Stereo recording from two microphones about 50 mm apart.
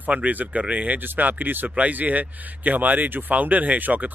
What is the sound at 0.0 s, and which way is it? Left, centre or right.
Speech, right.